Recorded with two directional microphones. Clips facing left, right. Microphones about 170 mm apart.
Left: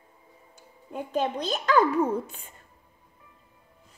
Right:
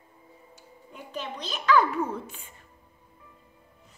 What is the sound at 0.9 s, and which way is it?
A child's voice, 45° left (ahead or behind).